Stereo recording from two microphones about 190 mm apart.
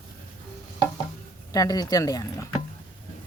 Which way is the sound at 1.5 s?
20° left (ahead or behind).